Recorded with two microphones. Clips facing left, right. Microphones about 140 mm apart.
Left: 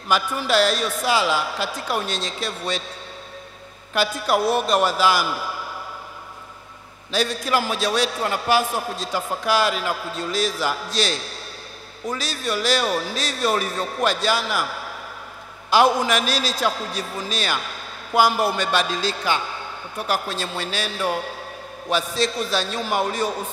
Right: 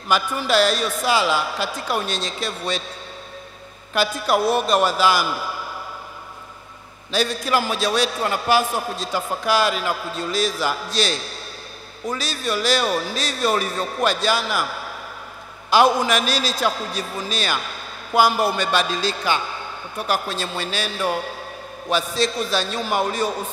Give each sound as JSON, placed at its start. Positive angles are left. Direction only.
{"t": 0.1, "sound": "a man's voice", "side_deg": -20}
{"t": 3.9, "sound": "a man's voice", "side_deg": -20}
{"t": 7.1, "sound": "a man's voice", "side_deg": -20}